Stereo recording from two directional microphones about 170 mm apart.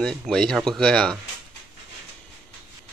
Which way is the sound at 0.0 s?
5° left (ahead or behind).